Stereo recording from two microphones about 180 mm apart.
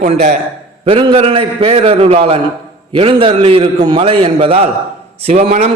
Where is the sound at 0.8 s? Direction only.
30° right (ahead or behind).